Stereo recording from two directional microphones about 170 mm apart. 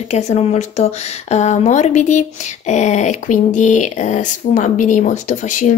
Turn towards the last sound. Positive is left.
turn(degrees=45)  # may be behind; listen again after turning